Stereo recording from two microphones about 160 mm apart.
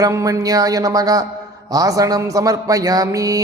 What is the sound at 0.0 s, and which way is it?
Mantra, 20° right (ahead or behind).